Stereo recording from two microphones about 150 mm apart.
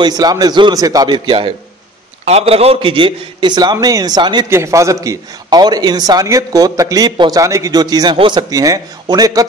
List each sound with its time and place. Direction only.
0.0 s a man's voice: 25° right (ahead or behind)
2.2 s a man's voice: 45° right (ahead or behind)
4.5 s a man's voice: 20° right (ahead or behind)